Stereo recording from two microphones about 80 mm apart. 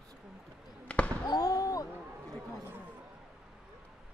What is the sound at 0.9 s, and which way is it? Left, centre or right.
Basketball bounce, centre.